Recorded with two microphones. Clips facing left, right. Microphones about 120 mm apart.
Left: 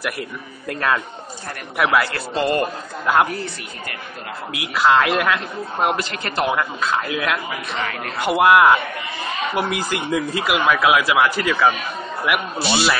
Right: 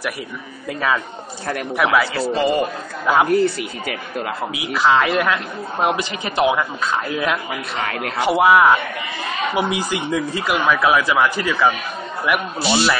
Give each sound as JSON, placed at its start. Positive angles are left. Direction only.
{"t": 0.7, "sound": "a man's voice", "side_deg": 0}
{"t": 3.3, "sound": "speech", "side_deg": -80}
{"t": 4.5, "sound": "a man's voice", "side_deg": 0}